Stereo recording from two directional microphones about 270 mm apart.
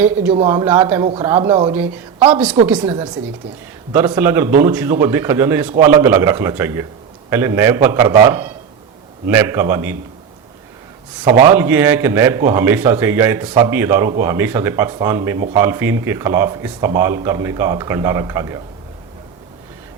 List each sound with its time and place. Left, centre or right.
0.3 s a man's voice: centre
3.9 s a man's voice: centre
11.4 s a man's voice: centre